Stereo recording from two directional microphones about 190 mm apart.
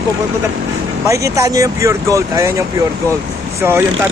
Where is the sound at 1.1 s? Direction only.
15° right (ahead or behind).